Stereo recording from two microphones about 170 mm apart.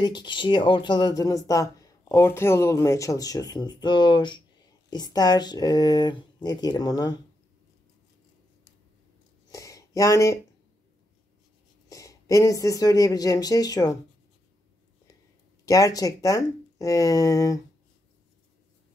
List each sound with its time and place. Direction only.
0.0 s speech: 25° left (ahead or behind)
9.5 s a sound: 20° left (ahead or behind)
11.9 s speech: 20° left (ahead or behind)
15.6 s speech: 20° left (ahead or behind)